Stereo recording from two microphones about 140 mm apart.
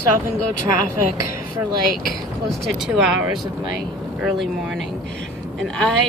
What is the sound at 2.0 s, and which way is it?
Speech, centre (ahead or behind).